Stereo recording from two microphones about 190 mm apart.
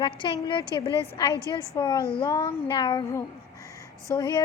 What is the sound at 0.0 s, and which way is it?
A woman's voice, 25° left (ahead or behind).